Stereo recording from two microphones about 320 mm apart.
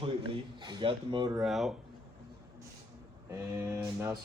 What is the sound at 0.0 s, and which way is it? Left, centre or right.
Speech, centre.